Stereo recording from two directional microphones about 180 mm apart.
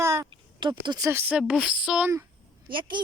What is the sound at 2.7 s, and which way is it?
Speech, 25° right (ahead or behind).